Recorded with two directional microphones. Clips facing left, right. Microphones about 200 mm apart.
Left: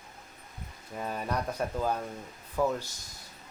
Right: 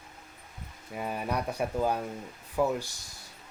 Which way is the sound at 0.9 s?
10° right (ahead or behind).